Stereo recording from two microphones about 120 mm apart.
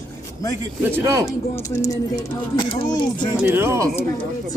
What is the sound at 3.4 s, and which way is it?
Speech, 15° right (ahead or behind).